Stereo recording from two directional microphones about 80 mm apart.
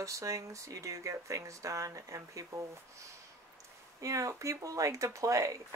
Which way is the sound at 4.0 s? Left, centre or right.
Right.